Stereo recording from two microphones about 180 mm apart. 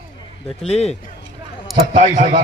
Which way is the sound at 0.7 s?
35° left (ahead or behind).